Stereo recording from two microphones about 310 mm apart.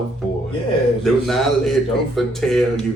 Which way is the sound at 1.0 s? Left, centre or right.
Centre.